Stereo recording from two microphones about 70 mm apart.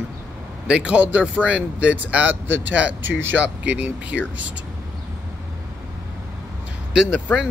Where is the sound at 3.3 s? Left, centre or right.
Centre.